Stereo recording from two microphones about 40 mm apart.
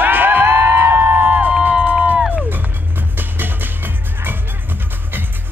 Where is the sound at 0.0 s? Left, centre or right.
Right.